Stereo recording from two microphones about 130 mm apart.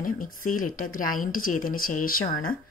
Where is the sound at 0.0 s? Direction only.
90° left.